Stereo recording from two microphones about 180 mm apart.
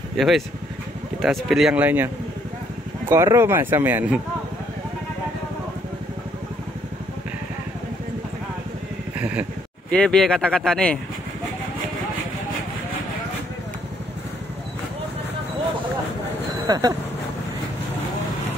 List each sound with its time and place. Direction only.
1.2 s speech: centre (ahead or behind)
3.1 s speech: 15° right (ahead or behind)
9.2 s speech: 10° right (ahead or behind)
9.8 s speech: 5° left (ahead or behind)
16.6 s speech: 20° right (ahead or behind)